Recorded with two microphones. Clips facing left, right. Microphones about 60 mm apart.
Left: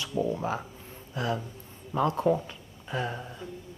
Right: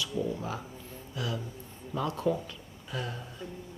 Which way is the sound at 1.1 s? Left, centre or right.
Left.